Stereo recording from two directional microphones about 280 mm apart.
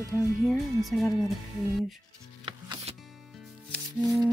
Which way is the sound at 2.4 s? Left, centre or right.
Centre.